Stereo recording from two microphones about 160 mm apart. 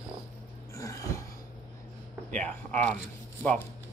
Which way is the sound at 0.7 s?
20° left (ahead or behind).